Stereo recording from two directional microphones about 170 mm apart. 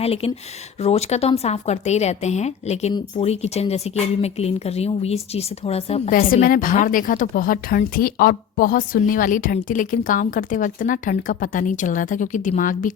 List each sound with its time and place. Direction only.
0.0 s speech: 35° left (ahead or behind)
6.1 s a woman's voice: 55° left (ahead or behind)